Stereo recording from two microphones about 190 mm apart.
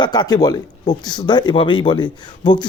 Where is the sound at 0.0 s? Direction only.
20° left (ahead or behind).